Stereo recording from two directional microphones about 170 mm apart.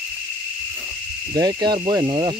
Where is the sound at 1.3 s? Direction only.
25° right (ahead or behind).